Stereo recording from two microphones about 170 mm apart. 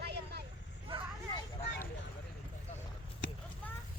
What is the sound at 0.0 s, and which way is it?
Vehicle, 75° right (ahead or behind).